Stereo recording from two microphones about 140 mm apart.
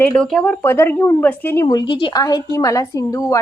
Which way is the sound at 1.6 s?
30° left (ahead or behind).